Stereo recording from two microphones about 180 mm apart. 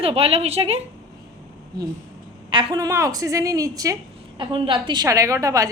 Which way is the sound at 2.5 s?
20° right (ahead or behind).